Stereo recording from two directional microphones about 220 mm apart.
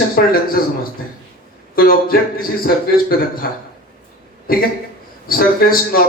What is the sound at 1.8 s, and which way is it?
A man's voice, 40° left (ahead or behind).